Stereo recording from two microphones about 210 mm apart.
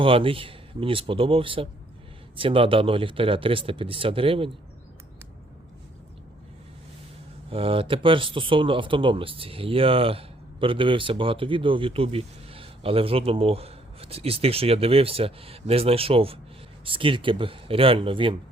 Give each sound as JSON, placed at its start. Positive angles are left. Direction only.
{"t": 0.0, "sound": "speech", "side_deg": -25}
{"t": 7.5, "sound": "speech", "side_deg": -25}